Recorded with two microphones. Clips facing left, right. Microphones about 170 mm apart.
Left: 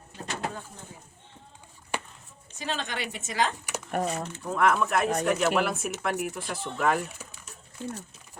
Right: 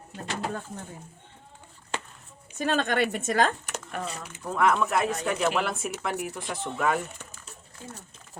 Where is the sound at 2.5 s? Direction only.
55° right (ahead or behind).